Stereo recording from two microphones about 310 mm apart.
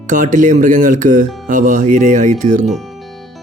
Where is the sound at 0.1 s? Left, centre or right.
Right.